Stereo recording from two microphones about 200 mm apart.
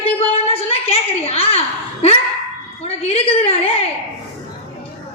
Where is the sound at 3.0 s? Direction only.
30° left (ahead or behind).